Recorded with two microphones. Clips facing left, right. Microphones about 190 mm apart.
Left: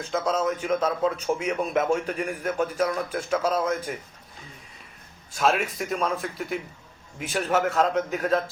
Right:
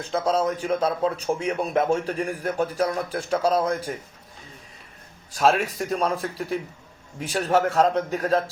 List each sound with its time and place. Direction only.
0.0 s a man's voice: 35° right (ahead or behind)
5.3 s a man's voice: 35° right (ahead or behind)